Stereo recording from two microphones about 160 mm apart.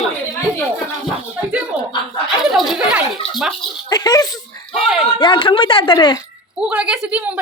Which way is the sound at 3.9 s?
25° left (ahead or behind).